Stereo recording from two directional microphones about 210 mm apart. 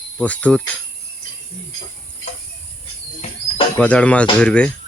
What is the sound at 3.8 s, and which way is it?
Cricket, 5° left (ahead or behind).